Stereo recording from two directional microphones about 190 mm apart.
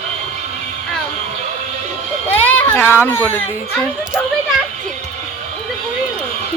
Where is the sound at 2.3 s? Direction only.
10° left (ahead or behind).